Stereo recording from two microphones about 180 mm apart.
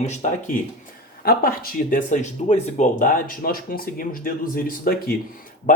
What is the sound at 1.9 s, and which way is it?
Speech, 45° left (ahead or behind).